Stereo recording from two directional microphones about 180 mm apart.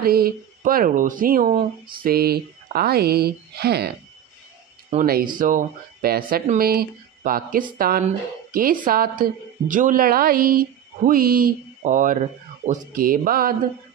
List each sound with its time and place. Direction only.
0.0 s speech: 55° right (ahead or behind)
4.9 s a woman's voice: 55° right (ahead or behind)